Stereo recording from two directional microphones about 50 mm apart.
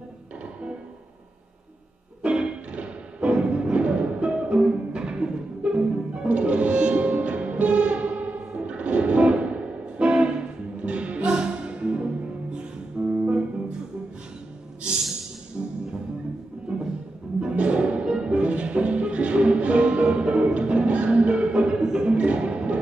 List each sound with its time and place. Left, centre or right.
2.2 s music: centre
16.7 s music: centre
22.1 s music: right